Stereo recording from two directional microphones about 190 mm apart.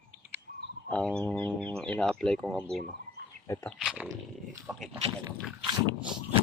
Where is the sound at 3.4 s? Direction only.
15° left (ahead or behind).